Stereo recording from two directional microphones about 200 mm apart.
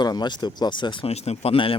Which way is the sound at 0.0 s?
20° left (ahead or behind).